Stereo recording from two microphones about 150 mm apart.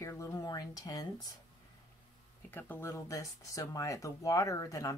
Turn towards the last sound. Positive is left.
turn(degrees=20)  # may be behind; listen again after turning